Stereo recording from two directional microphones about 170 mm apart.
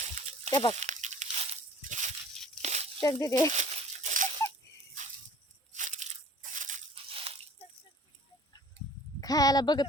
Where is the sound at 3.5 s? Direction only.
40° right (ahead or behind).